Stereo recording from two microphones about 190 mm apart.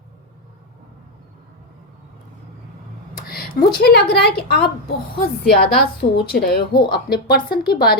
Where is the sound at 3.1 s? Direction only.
50° left (ahead or behind).